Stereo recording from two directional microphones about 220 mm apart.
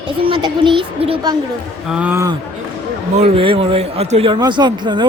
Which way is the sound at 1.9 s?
5° right (ahead or behind).